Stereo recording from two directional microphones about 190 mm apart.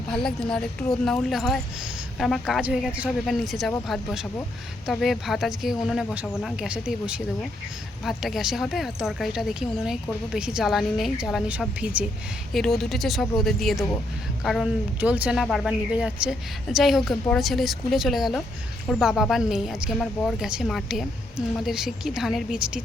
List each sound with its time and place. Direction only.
0.3 s a woman's voice: 5° left (ahead or behind)